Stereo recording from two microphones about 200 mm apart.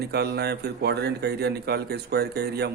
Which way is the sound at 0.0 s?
55° right (ahead or behind).